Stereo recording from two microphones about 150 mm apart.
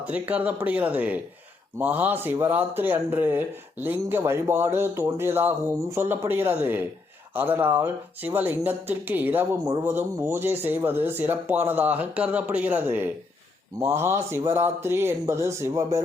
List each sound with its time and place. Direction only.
0.0 s speech: 10° right (ahead or behind)